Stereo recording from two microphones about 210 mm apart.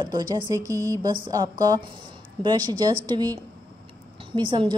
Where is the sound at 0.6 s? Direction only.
15° right (ahead or behind).